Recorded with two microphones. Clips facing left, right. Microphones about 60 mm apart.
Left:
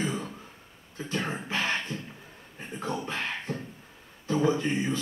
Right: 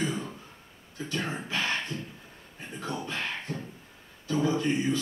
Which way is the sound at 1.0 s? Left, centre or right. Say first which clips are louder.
Left 1 dB; left.